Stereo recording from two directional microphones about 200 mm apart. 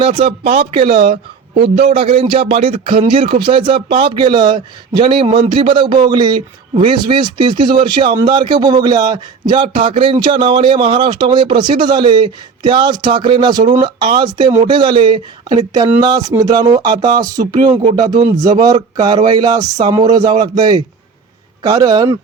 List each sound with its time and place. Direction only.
0.0 s a man's voice: 25° right (ahead or behind)